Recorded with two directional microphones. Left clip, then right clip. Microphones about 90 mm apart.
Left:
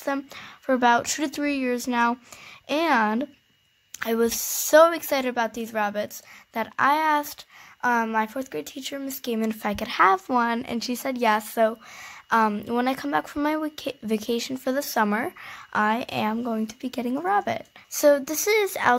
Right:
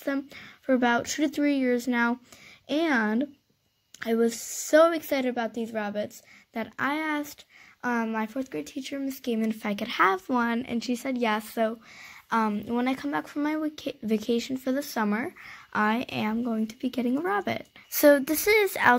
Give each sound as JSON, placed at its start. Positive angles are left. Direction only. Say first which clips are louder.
{"t": 0.0, "sound": "speech", "louder": "left 3 dB", "side_deg": 35}
{"t": 2.7, "sound": "speech", "louder": "left 4 dB", "side_deg": 40}
{"t": 3.9, "sound": "a woman's voice", "louder": "left 2 dB", "side_deg": 45}
{"t": 4.8, "sound": "a woman's voice", "louder": "left 3 dB", "side_deg": 40}
{"t": 12.8, "sound": "speech", "louder": "left 6 dB", "side_deg": 25}
{"t": 15.7, "sound": "speech", "louder": "left 3 dB", "side_deg": 10}
{"t": 16.1, "sound": "speech", "louder": "left 4 dB", "side_deg": 20}
{"t": 17.9, "sound": "speech", "louder": "even", "side_deg": -15}